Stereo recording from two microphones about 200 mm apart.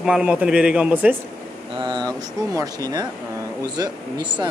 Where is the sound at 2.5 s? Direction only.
20° right (ahead or behind).